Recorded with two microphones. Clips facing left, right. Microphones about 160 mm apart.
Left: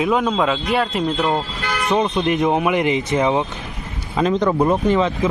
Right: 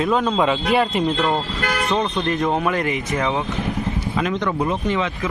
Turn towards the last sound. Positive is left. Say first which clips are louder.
# left 5 dB
turn(degrees=35)  # may be behind; listen again after turning